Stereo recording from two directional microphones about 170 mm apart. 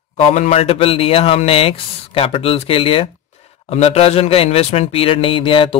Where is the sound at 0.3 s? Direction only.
40° left (ahead or behind).